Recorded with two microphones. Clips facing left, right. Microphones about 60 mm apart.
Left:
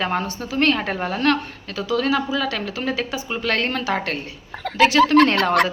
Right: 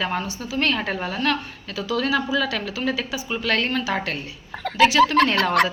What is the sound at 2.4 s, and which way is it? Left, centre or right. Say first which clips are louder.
Speech: left 1 dB; left.